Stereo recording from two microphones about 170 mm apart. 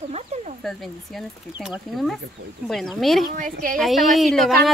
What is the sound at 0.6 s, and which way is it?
Speech, centre (ahead or behind).